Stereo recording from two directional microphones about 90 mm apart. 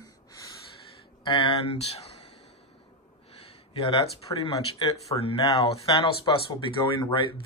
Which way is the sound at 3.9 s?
80° left.